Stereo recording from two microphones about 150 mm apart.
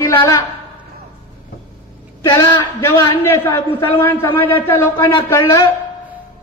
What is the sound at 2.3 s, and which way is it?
A man's voice, 20° left (ahead or behind).